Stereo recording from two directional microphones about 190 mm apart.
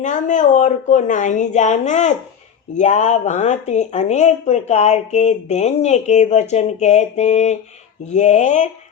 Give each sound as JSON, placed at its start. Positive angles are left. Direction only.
{"t": 0.0, "sound": "speech", "side_deg": 40}